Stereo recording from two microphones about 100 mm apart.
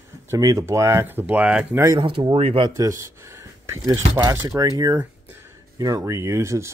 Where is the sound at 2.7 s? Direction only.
35° right (ahead or behind).